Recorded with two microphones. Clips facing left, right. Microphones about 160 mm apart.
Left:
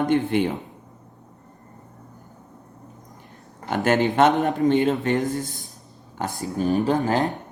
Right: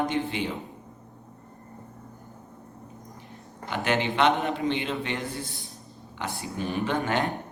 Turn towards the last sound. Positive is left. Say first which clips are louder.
# left 5 dB
turn(degrees=35)  # may be behind; listen again after turning